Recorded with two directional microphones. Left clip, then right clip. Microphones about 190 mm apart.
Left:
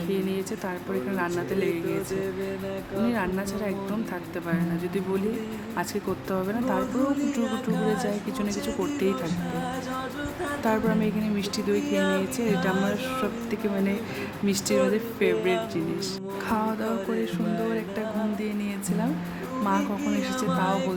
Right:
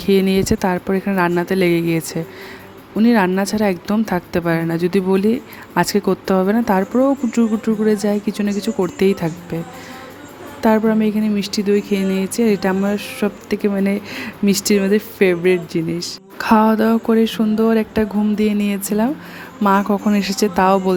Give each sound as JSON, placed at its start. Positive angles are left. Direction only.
{"t": 0.1, "sound": "speech", "side_deg": -55}
{"t": 3.1, "sound": "speech", "side_deg": -50}
{"t": 10.6, "sound": "speech", "side_deg": -40}